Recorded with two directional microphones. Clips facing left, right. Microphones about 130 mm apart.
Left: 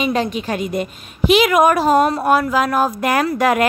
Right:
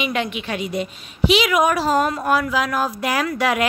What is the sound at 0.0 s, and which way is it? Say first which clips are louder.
A woman's voice: left 5 dB; 35° left (ahead or behind).